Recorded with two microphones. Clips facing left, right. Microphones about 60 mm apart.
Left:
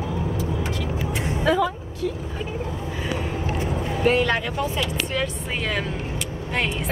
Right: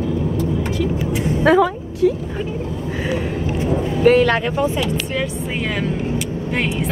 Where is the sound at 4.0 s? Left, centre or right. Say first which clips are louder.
Right 7 dB; right.